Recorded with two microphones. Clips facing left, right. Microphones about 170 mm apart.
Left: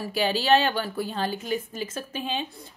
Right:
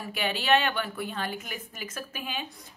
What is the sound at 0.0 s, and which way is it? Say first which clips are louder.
A woman's voice: left 6 dB; 30° left (ahead or behind).